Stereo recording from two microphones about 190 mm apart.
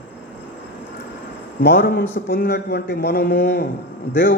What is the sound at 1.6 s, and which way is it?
A man's voice, 50° left (ahead or behind).